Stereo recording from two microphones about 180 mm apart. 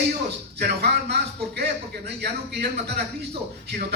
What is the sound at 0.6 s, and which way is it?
A man's voice, 65° right (ahead or behind).